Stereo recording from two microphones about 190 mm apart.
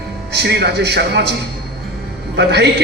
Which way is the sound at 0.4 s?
60° right (ahead or behind).